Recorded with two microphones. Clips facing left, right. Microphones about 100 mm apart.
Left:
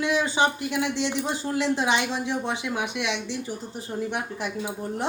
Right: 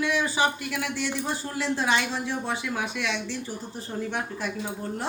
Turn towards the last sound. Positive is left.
turn(degrees=15)  # may be behind; listen again after turning